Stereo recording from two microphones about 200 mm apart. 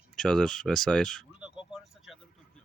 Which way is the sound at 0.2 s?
5° left (ahead or behind).